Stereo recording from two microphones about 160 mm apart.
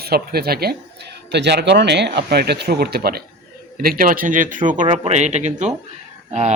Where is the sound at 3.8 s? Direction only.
65° right (ahead or behind).